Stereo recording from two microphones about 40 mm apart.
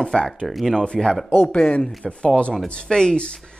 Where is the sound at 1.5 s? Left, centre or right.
Left.